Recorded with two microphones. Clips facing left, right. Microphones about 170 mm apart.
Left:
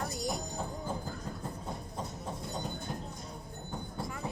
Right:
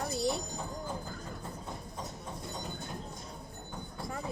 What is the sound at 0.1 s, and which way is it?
Music, 30° right (ahead or behind).